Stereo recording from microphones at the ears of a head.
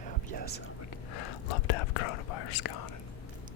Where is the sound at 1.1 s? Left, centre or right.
Left.